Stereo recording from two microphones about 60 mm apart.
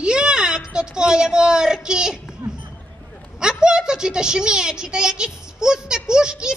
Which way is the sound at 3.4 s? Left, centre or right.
Centre.